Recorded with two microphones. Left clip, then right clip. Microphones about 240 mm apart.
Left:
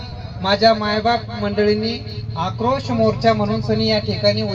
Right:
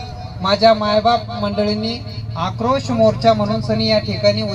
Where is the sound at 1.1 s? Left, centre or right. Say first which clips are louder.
Right 2 dB; left.